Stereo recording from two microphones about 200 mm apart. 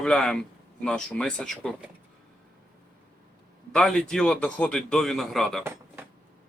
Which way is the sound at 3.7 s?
5° left (ahead or behind).